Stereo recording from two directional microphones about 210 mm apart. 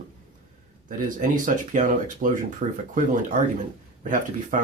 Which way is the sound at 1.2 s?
40° right (ahead or behind).